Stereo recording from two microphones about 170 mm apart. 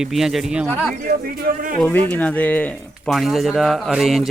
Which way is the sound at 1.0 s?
55° right (ahead or behind).